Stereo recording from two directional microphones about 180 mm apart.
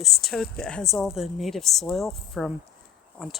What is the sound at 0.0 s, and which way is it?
A woman's voice, centre (ahead or behind).